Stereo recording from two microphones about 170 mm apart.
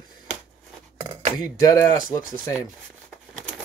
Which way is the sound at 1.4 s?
20° left (ahead or behind).